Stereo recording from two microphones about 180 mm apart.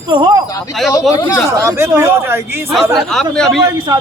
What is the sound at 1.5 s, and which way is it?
Speech, 15° right (ahead or behind).